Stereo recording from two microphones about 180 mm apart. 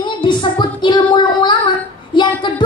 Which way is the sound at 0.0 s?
25° left (ahead or behind).